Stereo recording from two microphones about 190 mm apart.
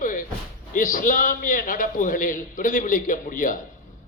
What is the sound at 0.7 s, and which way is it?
A man's voice, 45° left (ahead or behind).